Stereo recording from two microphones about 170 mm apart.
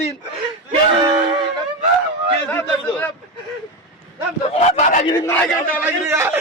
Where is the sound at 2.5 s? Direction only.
15° left (ahead or behind).